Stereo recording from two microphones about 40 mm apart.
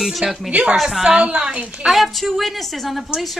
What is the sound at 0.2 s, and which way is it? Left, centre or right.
A man's voice, right.